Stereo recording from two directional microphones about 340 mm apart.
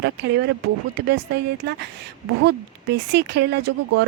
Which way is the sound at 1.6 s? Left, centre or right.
Right.